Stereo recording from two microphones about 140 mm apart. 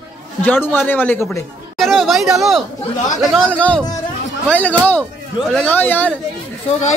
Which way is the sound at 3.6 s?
10° left (ahead or behind).